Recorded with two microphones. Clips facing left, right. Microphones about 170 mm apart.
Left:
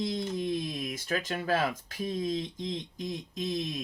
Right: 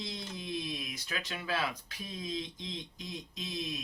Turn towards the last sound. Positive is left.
turn(degrees=45)  # may be behind; listen again after turning